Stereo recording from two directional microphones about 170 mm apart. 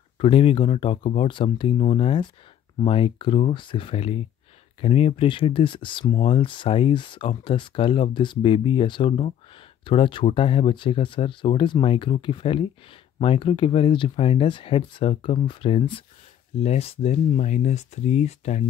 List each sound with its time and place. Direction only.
0.2 s speech: 30° left (ahead or behind)